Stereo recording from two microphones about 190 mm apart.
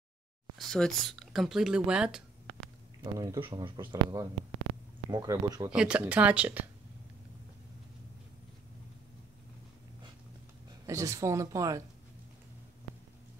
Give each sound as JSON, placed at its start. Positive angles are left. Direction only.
{"t": 0.6, "sound": "speech", "side_deg": 0}
{"t": 3.0, "sound": "speech", "side_deg": -20}
{"t": 5.7, "sound": "speech", "side_deg": -5}
{"t": 10.9, "sound": "speech", "side_deg": -15}